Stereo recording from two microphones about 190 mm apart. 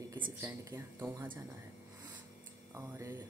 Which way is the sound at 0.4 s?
15° right (ahead or behind).